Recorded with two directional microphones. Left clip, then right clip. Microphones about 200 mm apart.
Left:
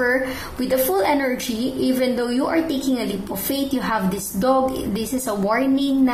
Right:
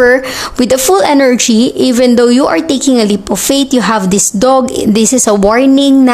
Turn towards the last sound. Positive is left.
turn(degrees=-45)  # may be behind; listen again after turning